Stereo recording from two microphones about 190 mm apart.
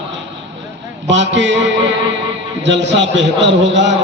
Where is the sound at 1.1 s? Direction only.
70° right (ahead or behind).